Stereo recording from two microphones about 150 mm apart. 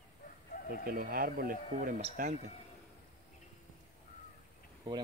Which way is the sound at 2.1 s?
55° right (ahead or behind).